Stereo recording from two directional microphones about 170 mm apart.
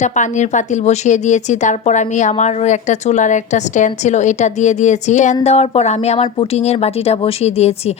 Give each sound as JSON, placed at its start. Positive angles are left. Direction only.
{"t": 0.0, "sound": "speech", "side_deg": 45}